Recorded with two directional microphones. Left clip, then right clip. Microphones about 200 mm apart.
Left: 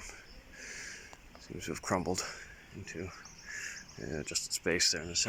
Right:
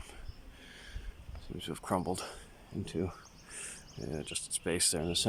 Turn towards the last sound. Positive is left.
turn(degrees=-15)  # may be behind; listen again after turning